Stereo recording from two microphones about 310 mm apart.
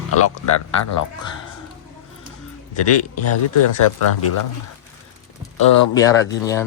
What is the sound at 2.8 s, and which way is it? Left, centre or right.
Speech, left.